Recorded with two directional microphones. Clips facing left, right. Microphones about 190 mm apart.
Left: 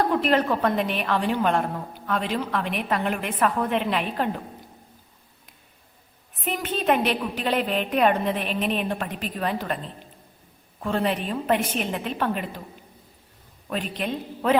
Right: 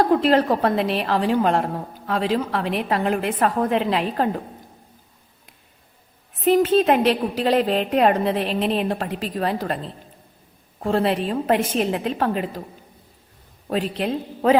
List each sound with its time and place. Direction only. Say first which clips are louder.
0.0 s a woman's voice: right 4 dB; 35° right (ahead or behind)
6.4 s a woman's voice: right 10 dB; 35° right (ahead or behind)
13.7 s a woman's voice: right 5 dB; 35° right (ahead or behind)